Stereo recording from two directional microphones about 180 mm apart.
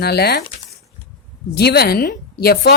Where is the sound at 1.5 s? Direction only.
60° left (ahead or behind).